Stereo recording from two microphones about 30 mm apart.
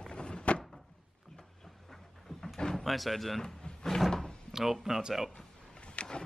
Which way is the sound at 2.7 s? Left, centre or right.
Centre.